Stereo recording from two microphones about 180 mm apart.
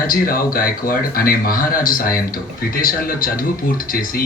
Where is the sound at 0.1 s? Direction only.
55° left (ahead or behind).